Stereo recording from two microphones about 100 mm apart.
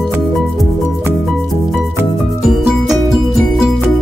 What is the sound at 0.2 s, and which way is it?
Music, centre (ahead or behind).